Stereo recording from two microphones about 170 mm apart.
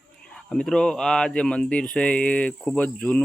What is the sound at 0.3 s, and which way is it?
Speech, 5° left (ahead or behind).